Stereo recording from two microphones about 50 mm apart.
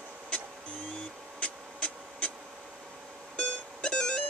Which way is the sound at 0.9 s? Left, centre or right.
Left.